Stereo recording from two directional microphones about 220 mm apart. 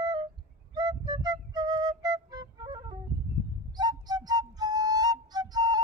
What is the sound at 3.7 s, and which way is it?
Music, 20° right (ahead or behind).